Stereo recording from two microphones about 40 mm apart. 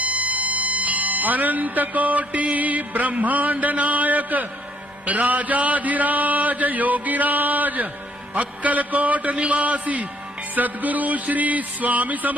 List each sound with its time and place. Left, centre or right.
0.0 s speech: right
5.0 s mantra: right
8.4 s a sound: right
10.5 s mantra: right